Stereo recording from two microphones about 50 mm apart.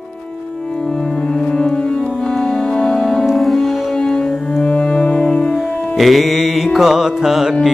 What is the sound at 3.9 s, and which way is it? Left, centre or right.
Music, centre.